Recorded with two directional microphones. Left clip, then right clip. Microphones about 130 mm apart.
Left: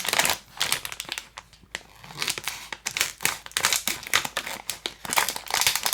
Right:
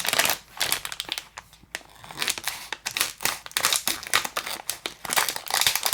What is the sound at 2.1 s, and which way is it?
Tearing, 40° right (ahead or behind).